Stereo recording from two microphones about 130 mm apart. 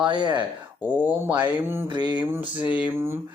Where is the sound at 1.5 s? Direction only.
15° right (ahead or behind).